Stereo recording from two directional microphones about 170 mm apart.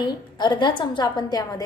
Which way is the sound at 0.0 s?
25° left (ahead or behind).